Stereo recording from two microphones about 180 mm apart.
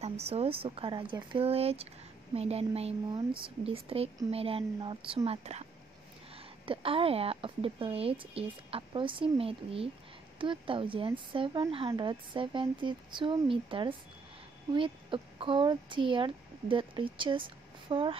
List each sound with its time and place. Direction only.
0.0 s speech: 35° right (ahead or behind)